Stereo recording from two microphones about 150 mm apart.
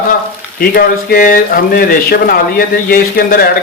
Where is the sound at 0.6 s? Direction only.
75° left (ahead or behind).